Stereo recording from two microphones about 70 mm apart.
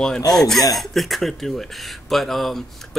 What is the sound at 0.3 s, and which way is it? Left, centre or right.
Speech, centre.